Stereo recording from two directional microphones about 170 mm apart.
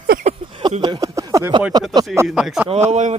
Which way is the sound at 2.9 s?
45° right (ahead or behind).